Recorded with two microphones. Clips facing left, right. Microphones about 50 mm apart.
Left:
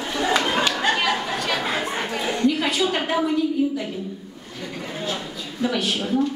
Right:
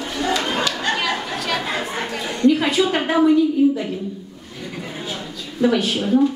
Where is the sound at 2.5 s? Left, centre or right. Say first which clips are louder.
Right 4 dB; centre.